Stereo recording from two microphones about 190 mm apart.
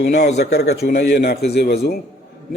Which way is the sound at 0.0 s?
60° left (ahead or behind).